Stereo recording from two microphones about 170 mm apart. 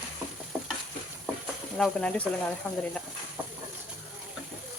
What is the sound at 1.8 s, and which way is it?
Speech, 5° left (ahead or behind).